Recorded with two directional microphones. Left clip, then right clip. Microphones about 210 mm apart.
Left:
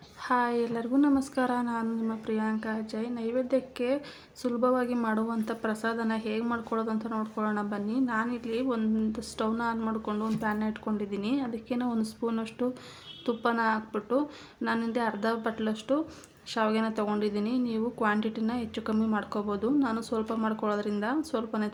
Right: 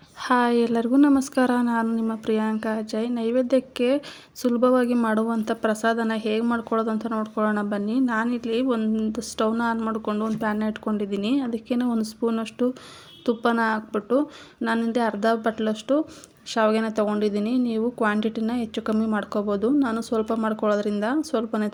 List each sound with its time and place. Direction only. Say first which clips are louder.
0.2 s a woman's voice: right 7 dB; 35° right (ahead or behind)